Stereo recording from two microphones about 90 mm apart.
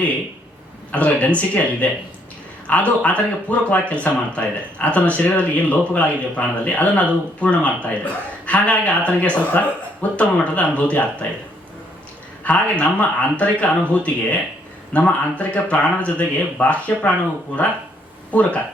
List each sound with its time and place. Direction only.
0.9 s speech: 15° left (ahead or behind)
12.5 s speech: 15° left (ahead or behind)
18.3 s speech: 15° left (ahead or behind)